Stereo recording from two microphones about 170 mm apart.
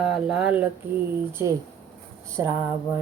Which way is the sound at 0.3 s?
10° right (ahead or behind).